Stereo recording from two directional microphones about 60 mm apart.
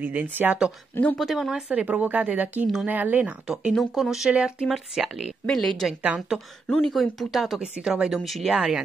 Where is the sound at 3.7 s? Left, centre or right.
Centre.